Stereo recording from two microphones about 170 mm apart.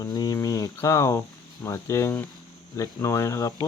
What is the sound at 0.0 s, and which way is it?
Cricket, 20° left (ahead or behind).